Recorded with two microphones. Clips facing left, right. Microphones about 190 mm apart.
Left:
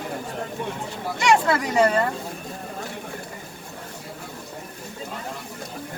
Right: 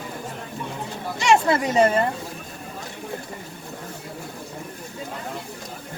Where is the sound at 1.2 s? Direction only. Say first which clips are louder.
Right 1 dB; 25° right (ahead or behind).